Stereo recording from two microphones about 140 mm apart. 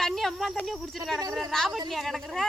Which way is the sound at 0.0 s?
Centre (ahead or behind).